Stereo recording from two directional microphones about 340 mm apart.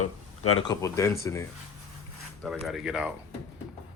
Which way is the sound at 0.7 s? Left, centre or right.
Centre.